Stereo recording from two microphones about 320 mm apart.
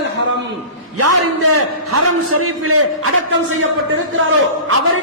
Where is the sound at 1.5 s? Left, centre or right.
Right.